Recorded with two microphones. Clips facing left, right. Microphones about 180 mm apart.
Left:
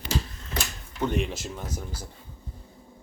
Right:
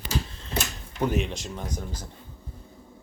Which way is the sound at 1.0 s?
5° right (ahead or behind).